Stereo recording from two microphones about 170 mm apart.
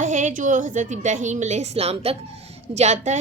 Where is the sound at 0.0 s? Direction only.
45° right (ahead or behind).